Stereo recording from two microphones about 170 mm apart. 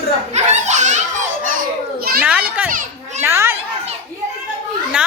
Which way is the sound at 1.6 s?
60° right (ahead or behind).